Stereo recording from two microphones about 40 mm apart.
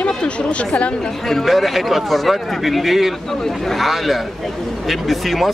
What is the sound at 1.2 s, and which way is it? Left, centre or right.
Speech, centre.